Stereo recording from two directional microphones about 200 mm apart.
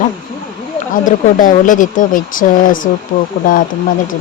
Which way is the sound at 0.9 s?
40° left (ahead or behind).